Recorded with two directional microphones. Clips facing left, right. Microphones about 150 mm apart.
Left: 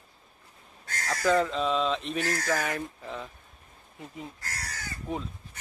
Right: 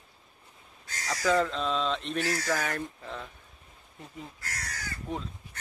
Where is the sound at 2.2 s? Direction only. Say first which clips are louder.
Left 1 dB; 45° left (ahead or behind).